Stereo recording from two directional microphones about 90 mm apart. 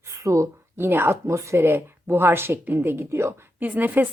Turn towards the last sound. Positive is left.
turn(degrees=-20)  # may be behind; listen again after turning